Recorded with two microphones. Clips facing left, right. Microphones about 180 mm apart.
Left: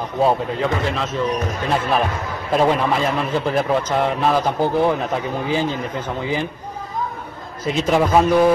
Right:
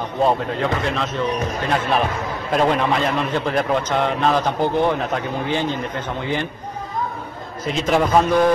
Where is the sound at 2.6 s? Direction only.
5° left (ahead or behind).